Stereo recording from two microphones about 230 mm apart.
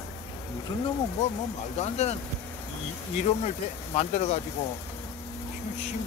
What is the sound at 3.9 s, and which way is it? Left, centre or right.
Speech, left.